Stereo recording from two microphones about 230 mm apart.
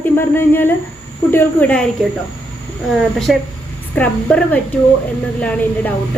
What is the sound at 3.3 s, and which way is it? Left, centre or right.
A woman's voice, centre.